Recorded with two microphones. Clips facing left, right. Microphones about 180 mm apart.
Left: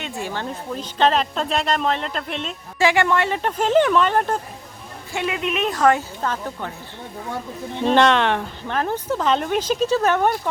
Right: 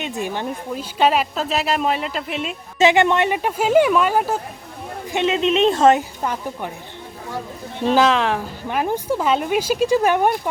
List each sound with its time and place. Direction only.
0.0 s a woman's voice: 20° right (ahead or behind)
2.7 s a woman's voice: 20° right (ahead or behind)
5.1 s a woman's voice: 25° right (ahead or behind)
7.9 s speech: centre (ahead or behind)
8.6 s a woman's voice: 10° right (ahead or behind)